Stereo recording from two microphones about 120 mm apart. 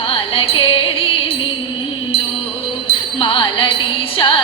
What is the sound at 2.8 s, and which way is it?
Music, 45° left (ahead or behind).